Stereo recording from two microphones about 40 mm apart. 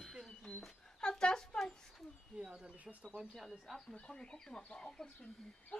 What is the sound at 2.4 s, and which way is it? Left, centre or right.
Bird, centre.